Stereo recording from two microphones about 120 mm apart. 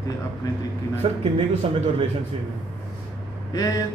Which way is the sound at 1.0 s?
55° right (ahead or behind).